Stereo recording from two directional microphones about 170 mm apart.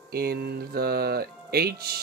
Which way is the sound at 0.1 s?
65° right (ahead or behind).